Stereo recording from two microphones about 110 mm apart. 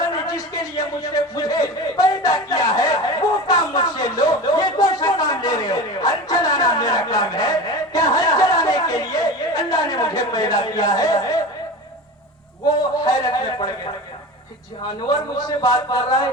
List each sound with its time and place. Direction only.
0.0 s a sound: 35° left (ahead or behind)
13.1 s speech: 40° left (ahead or behind)
15.0 s speech: 40° left (ahead or behind)